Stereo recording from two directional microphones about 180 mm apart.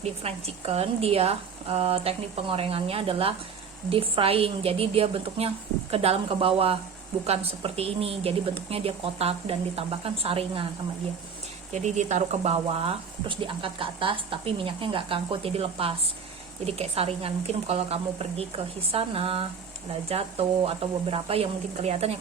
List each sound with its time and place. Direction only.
0.0 s speech: 35° right (ahead or behind)
11.7 s speech: 40° right (ahead or behind)
20.7 s speech: 35° right (ahead or behind)